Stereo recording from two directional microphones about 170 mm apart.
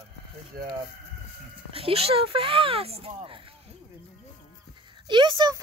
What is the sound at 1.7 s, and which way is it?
Speech, 35° right (ahead or behind).